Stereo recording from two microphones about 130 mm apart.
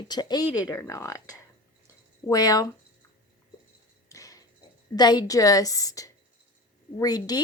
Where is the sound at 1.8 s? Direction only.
30° left (ahead or behind).